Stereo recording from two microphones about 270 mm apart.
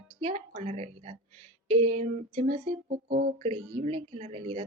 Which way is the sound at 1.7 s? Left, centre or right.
Right.